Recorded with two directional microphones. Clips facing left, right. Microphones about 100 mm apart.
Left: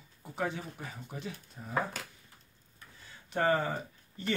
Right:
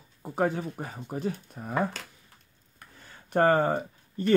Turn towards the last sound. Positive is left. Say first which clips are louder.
# right 8 dB
turn(degrees=-45)  # may be behind; listen again after turning